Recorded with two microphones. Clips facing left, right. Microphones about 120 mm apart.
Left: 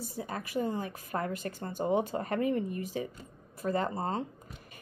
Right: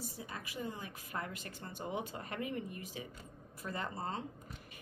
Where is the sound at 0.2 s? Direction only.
45° left (ahead or behind).